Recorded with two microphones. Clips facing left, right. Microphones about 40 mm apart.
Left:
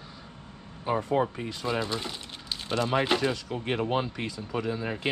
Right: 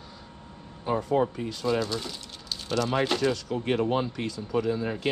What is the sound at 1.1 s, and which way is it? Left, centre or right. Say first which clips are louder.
Speech: right 2 dB; centre.